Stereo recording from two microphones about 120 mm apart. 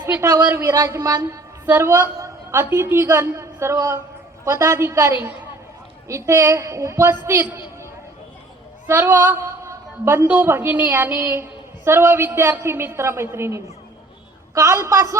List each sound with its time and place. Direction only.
0.0 s a woman's voice: 20° right (ahead or behind)
8.9 s a woman's voice: 20° right (ahead or behind)